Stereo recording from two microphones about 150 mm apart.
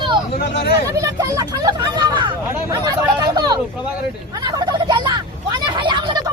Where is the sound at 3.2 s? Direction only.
25° right (ahead or behind).